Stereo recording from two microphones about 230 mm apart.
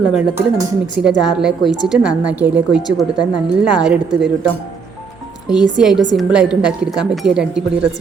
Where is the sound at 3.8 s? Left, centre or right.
Centre.